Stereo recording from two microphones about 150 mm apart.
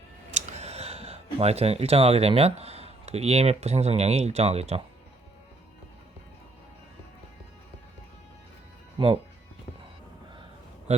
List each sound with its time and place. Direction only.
0.3 s speech: 50° right (ahead or behind)
9.0 s speech: 30° right (ahead or behind)